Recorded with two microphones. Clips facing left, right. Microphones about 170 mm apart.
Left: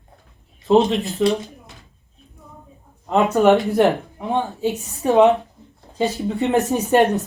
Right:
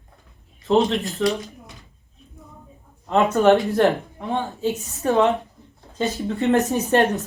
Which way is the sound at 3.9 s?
20° left (ahead or behind).